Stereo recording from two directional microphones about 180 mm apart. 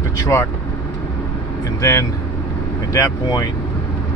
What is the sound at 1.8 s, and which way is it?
Speech, 15° left (ahead or behind).